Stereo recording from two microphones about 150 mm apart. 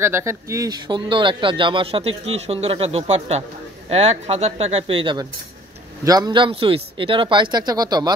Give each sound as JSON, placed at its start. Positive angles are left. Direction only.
{"t": 0.0, "sound": "speech", "side_deg": -15}